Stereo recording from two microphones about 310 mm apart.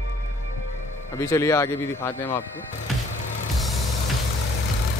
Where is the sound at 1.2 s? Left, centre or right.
Centre.